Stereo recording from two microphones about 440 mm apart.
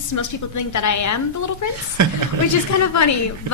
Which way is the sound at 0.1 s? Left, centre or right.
Left.